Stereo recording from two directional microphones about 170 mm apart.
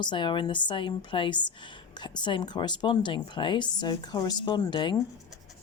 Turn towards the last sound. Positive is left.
turn(degrees=30)  # may be behind; listen again after turning